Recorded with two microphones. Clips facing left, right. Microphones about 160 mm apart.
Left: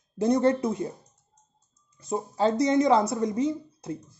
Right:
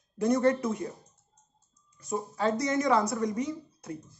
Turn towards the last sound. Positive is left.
turn(degrees=25)  # may be behind; listen again after turning